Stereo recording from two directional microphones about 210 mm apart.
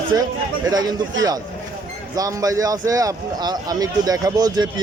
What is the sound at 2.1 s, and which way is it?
A man's voice, 15° right (ahead or behind).